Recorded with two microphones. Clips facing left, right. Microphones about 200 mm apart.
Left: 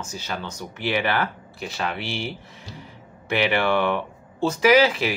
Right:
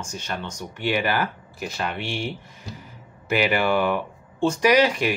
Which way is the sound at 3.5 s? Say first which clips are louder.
Left 1 dB; 5° right (ahead or behind).